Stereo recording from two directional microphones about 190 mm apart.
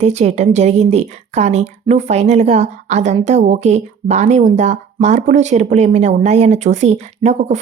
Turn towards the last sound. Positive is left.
turn(degrees=-35)  # may be behind; listen again after turning